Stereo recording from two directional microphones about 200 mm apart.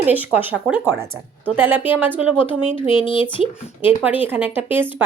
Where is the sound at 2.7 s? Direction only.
25° left (ahead or behind).